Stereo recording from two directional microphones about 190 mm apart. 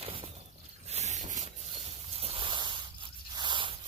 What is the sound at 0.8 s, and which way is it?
Boat, 35° right (ahead or behind).